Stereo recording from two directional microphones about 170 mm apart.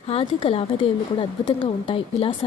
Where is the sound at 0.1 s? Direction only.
30° left (ahead or behind).